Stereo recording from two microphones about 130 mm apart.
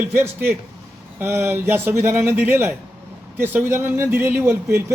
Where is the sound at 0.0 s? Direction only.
15° right (ahead or behind).